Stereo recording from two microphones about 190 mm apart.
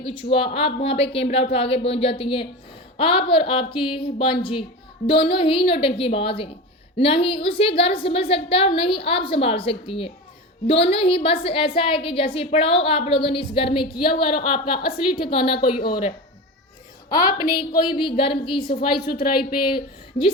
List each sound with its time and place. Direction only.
0.0 s a woman's voice: 30° left (ahead or behind)
14.9 s a woman's voice: 30° left (ahead or behind)
15.5 s speech: 55° left (ahead or behind)
17.1 s a woman's voice: 20° left (ahead or behind)
18.9 s a woman's voice: 50° left (ahead or behind)